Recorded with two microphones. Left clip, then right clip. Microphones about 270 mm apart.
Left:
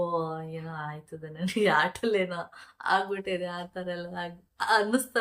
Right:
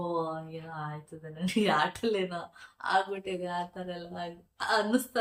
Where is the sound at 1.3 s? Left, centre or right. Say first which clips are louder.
Left 3 dB; centre.